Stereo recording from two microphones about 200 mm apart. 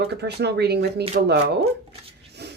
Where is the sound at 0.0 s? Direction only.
55° right (ahead or behind).